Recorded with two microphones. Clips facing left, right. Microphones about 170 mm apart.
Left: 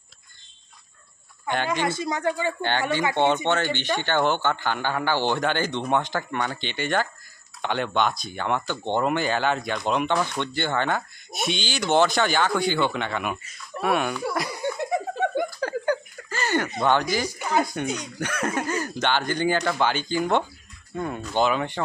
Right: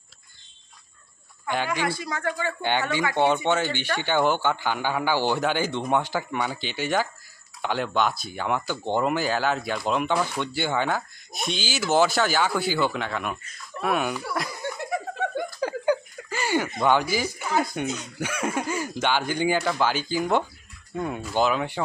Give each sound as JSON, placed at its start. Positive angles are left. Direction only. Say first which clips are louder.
{"t": 1.7, "sound": "speech", "louder": "left 2 dB", "side_deg": 20}
{"t": 3.4, "sound": "a man's voice", "louder": "even", "side_deg": -10}
{"t": 14.5, "sound": "laughter", "louder": "left 4 dB", "side_deg": 20}
{"t": 15.6, "sound": "a sound", "louder": "right 1 dB", "side_deg": -10}
{"t": 16.8, "sound": "a man's voice", "louder": "even", "side_deg": -10}